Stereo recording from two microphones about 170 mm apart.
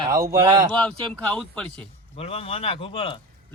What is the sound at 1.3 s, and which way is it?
Speech, 5° left (ahead or behind).